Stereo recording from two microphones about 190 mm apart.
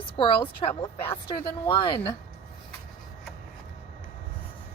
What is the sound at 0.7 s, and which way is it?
Speech, 15° left (ahead or behind).